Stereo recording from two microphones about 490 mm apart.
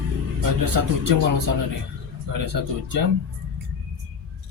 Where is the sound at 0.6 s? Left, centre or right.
Right.